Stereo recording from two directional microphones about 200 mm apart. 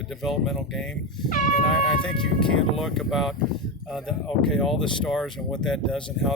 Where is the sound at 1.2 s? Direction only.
40° left (ahead or behind).